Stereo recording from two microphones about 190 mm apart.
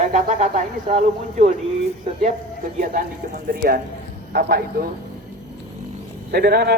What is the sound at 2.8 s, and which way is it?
A man's voice, 45° right (ahead or behind).